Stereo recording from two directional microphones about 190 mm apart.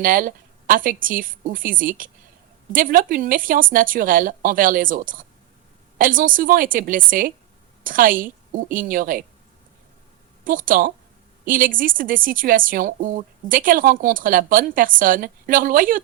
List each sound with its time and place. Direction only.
0.0 s a woman's voice: 45° right (ahead or behind)
10.4 s a woman's voice: 45° right (ahead or behind)